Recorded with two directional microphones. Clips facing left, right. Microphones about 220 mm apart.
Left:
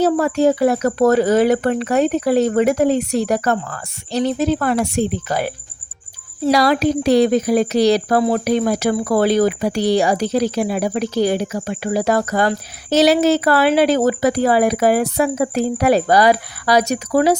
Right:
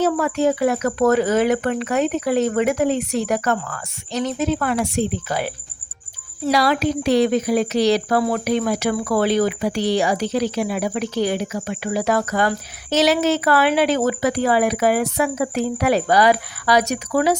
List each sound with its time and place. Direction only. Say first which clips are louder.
0.0 s speech: left 4 dB; 35° left (ahead or behind)